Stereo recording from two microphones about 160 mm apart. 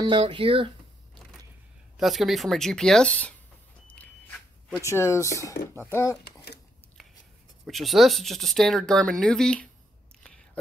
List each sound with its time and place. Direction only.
0.0 s speech: 30° right (ahead or behind)
2.0 s speech: centre (ahead or behind)
3.9 s a sound: 10° left (ahead or behind)
4.8 s speech: 20° left (ahead or behind)
6.2 s a sound: 90° left
7.6 s speech: centre (ahead or behind)
10.2 s whispering: 5° left (ahead or behind)